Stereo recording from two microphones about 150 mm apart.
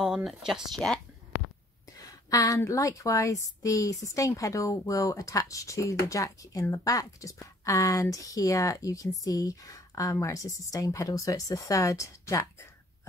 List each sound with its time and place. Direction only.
0.0 s speech: 5° right (ahead or behind)
2.0 s a woman's voice: 20° left (ahead or behind)